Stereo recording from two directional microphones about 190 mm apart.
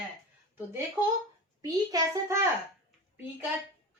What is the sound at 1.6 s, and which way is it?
Speech, 15° right (ahead or behind).